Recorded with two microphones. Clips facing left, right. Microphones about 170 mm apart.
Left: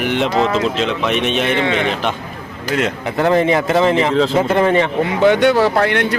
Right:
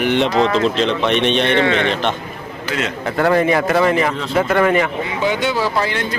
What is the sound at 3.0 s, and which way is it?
Speech, 20° left (ahead or behind).